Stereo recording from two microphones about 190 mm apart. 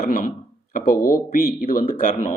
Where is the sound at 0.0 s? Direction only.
45° left (ahead or behind).